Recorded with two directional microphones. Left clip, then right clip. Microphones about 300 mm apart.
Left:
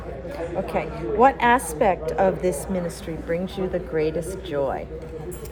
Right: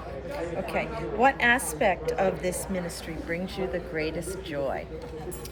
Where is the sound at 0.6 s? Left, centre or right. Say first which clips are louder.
Left 4 dB; centre.